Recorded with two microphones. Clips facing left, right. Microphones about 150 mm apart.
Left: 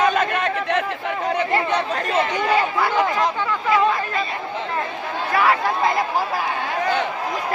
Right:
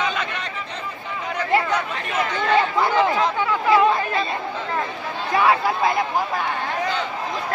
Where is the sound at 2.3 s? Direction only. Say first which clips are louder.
Right 4 dB; 10° left (ahead or behind).